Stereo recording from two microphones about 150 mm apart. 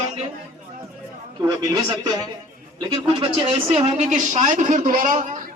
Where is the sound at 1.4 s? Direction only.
25° right (ahead or behind); by 4.1 s 40° right (ahead or behind).